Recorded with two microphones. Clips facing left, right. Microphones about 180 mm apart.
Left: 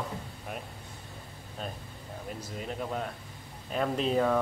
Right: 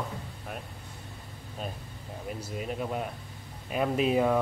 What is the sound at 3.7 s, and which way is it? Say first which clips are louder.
Speech: right 2 dB; 10° right (ahead or behind).